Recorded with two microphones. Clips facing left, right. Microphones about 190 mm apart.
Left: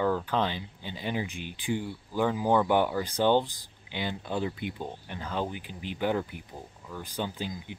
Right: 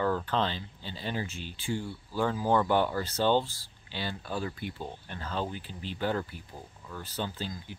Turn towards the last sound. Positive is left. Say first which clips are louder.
# left 2 dB
turn(degrees=15)  # may be behind; listen again after turning